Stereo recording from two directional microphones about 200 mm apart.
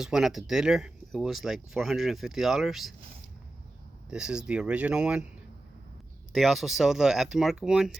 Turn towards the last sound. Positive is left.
turn(degrees=-5)  # may be behind; listen again after turning